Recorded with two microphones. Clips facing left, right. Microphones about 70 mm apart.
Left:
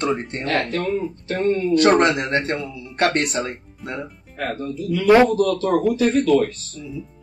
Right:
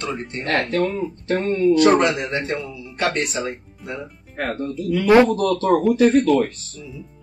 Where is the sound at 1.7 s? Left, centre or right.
Left.